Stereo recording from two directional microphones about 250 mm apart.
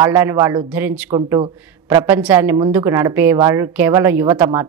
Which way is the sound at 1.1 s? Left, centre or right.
Centre.